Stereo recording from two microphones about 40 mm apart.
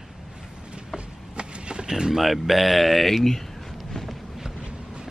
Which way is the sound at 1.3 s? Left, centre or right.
Right.